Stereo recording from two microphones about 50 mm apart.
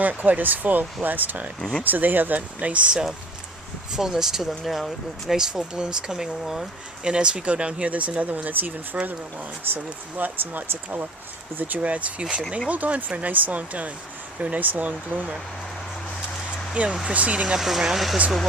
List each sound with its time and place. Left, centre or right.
0.0 s speech: right
3.9 s speech: centre
5.4 s speech: centre
7.0 s speech: centre
16.8 s speech: right
17.6 s speech: centre